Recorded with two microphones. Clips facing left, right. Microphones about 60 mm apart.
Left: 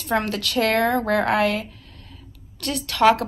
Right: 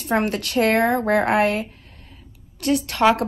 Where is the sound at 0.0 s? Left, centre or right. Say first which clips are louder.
Right 2 dB; right.